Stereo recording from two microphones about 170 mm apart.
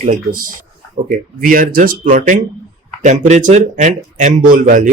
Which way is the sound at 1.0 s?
55° right (ahead or behind).